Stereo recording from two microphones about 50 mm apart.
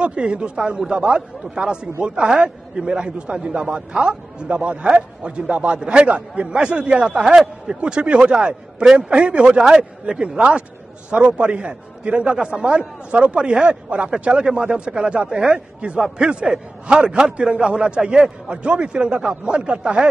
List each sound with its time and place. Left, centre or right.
0.0 s a man's voice: right
7.2 s a man's voice: centre